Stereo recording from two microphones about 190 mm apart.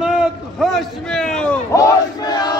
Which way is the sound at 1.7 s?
20° left (ahead or behind).